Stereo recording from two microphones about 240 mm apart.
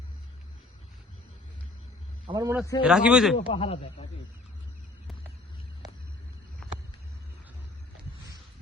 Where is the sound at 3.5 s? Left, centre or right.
Left.